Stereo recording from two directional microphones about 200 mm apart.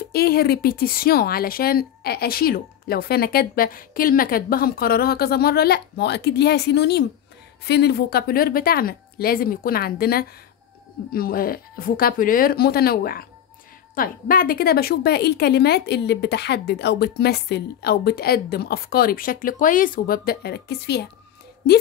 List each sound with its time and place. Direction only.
0.1 s a woman's voice: 50° left (ahead or behind)